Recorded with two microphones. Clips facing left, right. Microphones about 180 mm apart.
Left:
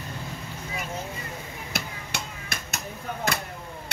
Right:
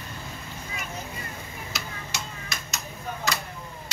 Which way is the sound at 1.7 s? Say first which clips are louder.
Left 4 dB; 55° left (ahead or behind).